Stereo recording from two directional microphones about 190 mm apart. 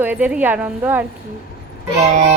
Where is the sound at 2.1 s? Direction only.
40° right (ahead or behind).